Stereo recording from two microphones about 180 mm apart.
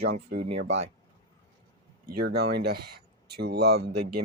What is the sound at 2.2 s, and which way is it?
Speech, 65° right (ahead or behind).